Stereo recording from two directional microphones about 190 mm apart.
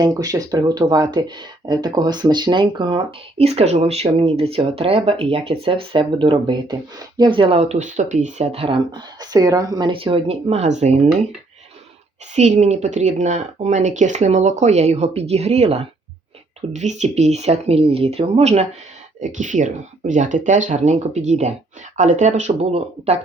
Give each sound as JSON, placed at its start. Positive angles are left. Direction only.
{"t": 0.0, "sound": "speech", "side_deg": -20}
{"t": 12.3, "sound": "speech", "side_deg": -35}